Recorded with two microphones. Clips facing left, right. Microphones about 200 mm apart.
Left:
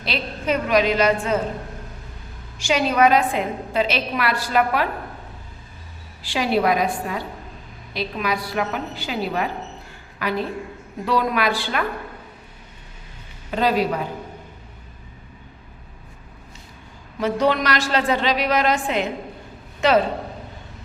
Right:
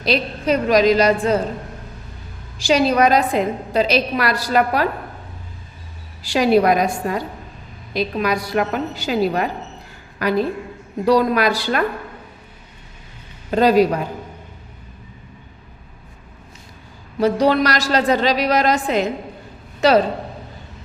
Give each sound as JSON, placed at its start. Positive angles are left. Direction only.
{"t": 0.0, "sound": "a woman's voice", "side_deg": -40}
{"t": 2.6, "sound": "a woman's voice", "side_deg": -35}
{"t": 6.2, "sound": "a woman's voice", "side_deg": -40}
{"t": 13.5, "sound": "a woman's voice", "side_deg": -40}
{"t": 17.2, "sound": "a woman's voice", "side_deg": -40}